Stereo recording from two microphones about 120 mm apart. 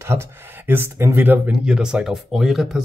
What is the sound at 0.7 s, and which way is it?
Speech, 20° right (ahead or behind).